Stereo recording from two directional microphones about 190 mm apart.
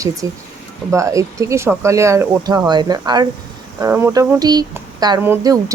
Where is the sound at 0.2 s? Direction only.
15° right (ahead or behind).